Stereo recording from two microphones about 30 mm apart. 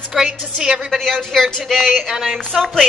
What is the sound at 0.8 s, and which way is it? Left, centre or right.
A woman's voice, centre.